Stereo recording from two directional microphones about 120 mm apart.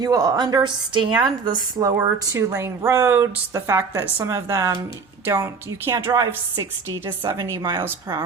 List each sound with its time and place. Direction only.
0.0 s a woman's voice: 30° right (ahead or behind)
2.0 s a woman's voice: 20° right (ahead or behind)